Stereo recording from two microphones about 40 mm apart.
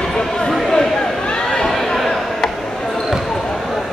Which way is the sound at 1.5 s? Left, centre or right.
Centre.